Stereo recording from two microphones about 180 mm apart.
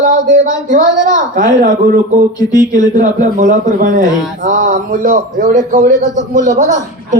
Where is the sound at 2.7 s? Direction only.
45° right (ahead or behind).